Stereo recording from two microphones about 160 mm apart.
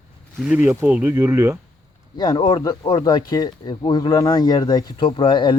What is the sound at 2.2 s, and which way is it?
Speech, 25° left (ahead or behind).